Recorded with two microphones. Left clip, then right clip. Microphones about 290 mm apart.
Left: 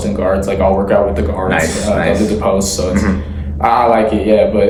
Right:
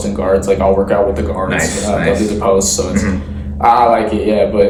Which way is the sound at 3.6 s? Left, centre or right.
Centre.